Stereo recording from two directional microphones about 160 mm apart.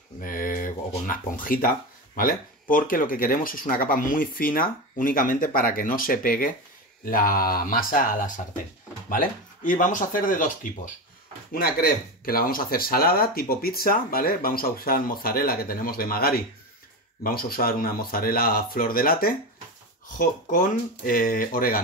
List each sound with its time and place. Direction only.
0.2 s speech: 60° left (ahead or behind)
11.5 s speech: 65° left (ahead or behind)